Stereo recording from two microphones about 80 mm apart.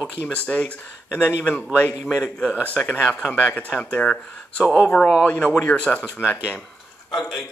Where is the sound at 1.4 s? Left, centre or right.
Left.